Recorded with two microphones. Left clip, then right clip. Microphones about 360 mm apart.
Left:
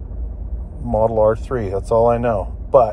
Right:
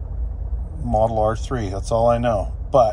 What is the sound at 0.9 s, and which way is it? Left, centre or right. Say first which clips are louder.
Speech: left 4 dB; centre.